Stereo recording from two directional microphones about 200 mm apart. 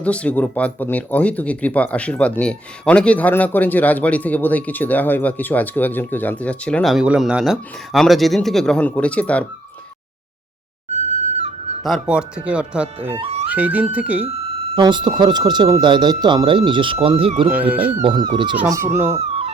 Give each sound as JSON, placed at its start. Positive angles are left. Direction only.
{"t": 0.0, "sound": "speech", "side_deg": 5}
{"t": 10.9, "sound": "whistle", "side_deg": -35}
{"t": 11.8, "sound": "speech", "side_deg": 0}
{"t": 13.1, "sound": "speech", "side_deg": -30}
{"t": 13.5, "sound": "speech", "side_deg": -10}
{"t": 14.3, "sound": "speech", "side_deg": -30}
{"t": 17.5, "sound": "speech", "side_deg": -10}
{"t": 18.0, "sound": "speech", "side_deg": -25}
{"t": 18.5, "sound": "speech", "side_deg": -10}
{"t": 19.2, "sound": "music", "side_deg": -30}